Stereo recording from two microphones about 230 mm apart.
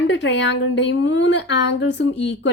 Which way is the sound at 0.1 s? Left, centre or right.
Left.